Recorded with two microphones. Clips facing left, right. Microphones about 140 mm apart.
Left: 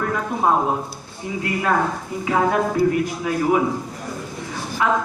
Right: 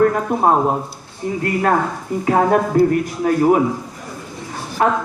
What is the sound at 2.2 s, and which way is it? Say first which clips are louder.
A man's voice: right 4 dB; 45° right (ahead or behind).